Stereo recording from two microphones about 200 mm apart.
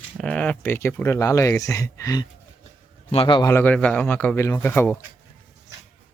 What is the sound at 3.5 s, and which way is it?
Speech, 10° left (ahead or behind).